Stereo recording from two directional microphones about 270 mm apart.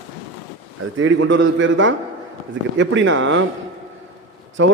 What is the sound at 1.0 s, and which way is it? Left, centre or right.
A man's voice, right.